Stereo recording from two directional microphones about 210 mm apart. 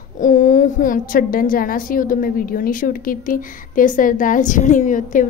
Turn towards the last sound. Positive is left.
turn(degrees=40)  # may be behind; listen again after turning